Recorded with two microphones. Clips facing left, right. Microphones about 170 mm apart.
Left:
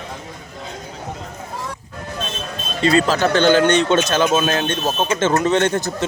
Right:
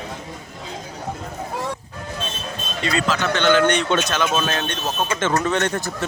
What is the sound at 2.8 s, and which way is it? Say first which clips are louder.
Speech: left 7 dB; 35° left (ahead or behind).